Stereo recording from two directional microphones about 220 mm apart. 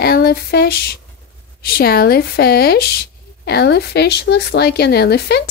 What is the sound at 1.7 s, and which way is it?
Speech, 40° left (ahead or behind).